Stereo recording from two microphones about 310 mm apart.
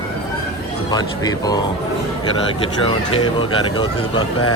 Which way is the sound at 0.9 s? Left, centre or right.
Centre.